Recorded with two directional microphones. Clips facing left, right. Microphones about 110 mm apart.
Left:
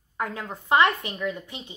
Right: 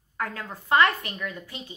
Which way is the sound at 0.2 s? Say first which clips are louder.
Left 2 dB; 20° left (ahead or behind).